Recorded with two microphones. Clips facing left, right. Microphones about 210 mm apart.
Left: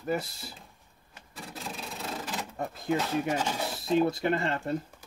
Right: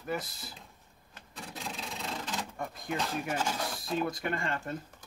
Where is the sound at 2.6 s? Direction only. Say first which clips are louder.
Left 11 dB; 30° left (ahead or behind).